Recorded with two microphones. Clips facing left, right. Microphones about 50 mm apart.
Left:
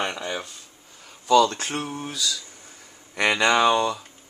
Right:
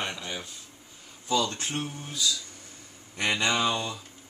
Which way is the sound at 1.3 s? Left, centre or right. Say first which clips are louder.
Left 9 dB; left.